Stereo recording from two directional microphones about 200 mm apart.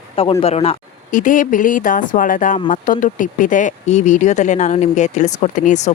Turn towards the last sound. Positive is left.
turn(degrees=40)  # may be behind; listen again after turning